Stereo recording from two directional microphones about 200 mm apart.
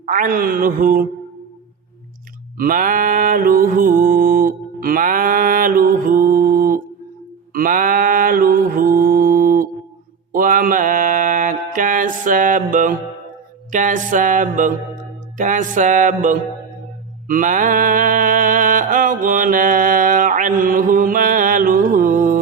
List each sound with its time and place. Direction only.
0.0 s speech: 45° right (ahead or behind)
2.6 s mantra: 45° right (ahead or behind)